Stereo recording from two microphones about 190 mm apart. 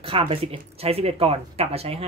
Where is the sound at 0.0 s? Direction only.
30° right (ahead or behind).